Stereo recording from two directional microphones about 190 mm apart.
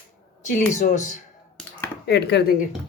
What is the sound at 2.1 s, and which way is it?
Speech, 60° left (ahead or behind).